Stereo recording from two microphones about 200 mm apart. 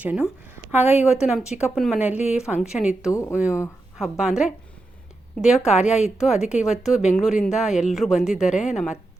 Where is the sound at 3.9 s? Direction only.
Centre (ahead or behind).